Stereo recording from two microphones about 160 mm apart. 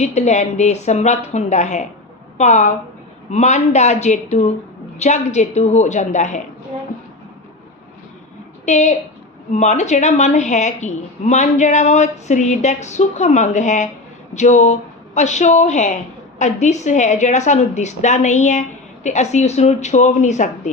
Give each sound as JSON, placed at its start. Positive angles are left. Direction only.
{"t": 0.0, "sound": "a woman's voice", "side_deg": 45}
{"t": 8.6, "sound": "a woman's voice", "side_deg": 45}